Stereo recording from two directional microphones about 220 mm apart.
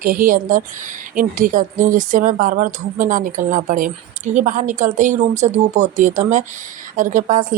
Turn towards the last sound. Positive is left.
turn(degrees=-35)  # may be behind; listen again after turning